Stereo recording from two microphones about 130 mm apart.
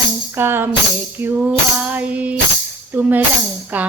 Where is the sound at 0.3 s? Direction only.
15° right (ahead or behind).